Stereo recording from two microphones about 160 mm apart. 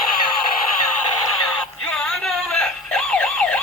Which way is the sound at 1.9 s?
Centre (ahead or behind).